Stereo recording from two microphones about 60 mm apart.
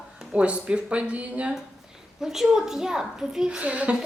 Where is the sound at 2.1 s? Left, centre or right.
Centre; by 3.9 s right.